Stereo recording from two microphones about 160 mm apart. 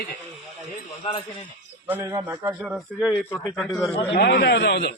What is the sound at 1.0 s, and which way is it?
Speech, 35° left (ahead or behind).